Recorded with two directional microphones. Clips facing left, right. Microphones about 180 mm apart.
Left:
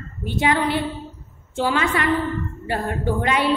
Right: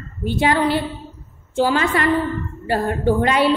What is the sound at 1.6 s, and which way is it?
Speech, 35° right (ahead or behind).